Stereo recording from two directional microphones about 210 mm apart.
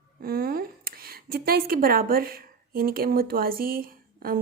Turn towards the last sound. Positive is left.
turn(degrees=-45)  # may be behind; listen again after turning